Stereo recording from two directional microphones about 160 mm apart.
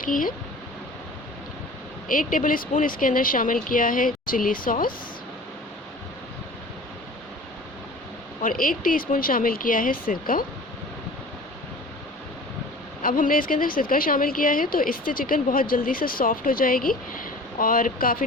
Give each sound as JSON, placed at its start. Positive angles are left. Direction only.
{"t": 0.0, "sound": "a woman's voice", "side_deg": 60}
{"t": 2.0, "sound": "a woman's voice", "side_deg": 55}
{"t": 8.4, "sound": "a woman's voice", "side_deg": 60}
{"t": 13.0, "sound": "a woman's voice", "side_deg": 60}